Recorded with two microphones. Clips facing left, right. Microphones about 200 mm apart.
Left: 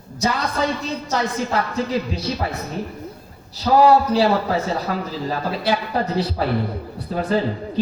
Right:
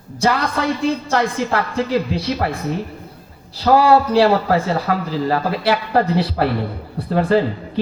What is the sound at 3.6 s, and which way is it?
A man's voice, 65° right (ahead or behind).